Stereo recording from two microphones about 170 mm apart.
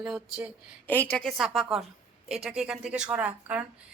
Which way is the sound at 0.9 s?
10° left (ahead or behind).